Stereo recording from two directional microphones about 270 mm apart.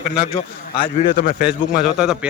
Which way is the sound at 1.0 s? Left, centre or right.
Left.